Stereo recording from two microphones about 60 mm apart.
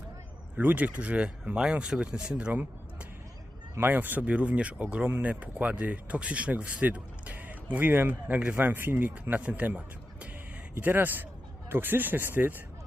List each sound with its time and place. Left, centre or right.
0.5 s speech: right
3.8 s speech: right